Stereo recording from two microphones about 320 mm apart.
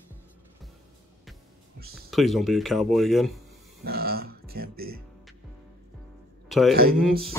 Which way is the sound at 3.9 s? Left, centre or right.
Right.